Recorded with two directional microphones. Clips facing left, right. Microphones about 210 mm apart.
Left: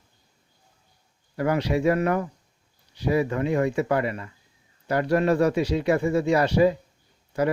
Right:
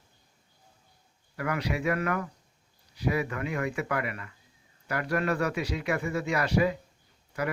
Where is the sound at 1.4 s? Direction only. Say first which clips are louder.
Left 8 dB; 30° left (ahead or behind).